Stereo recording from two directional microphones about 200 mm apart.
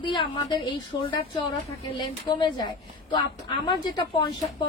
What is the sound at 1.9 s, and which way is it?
A woman's voice, 20° left (ahead or behind).